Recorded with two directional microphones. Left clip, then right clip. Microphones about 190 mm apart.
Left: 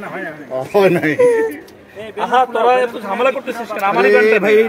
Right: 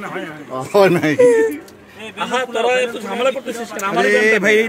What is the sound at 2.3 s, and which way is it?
A man's voice, 15° right (ahead or behind).